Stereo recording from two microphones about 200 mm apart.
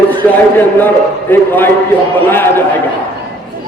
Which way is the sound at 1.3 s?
10° left (ahead or behind).